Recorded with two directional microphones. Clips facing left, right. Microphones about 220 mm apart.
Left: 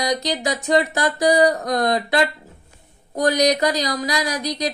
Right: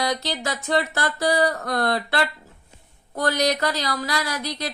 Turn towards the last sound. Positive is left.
turn(degrees=15)  # may be behind; listen again after turning